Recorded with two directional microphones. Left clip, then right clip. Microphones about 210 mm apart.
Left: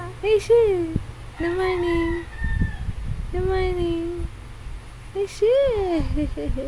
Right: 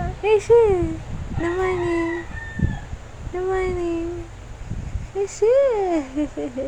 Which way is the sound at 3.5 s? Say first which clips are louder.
Right 1 dB; 20° left (ahead or behind).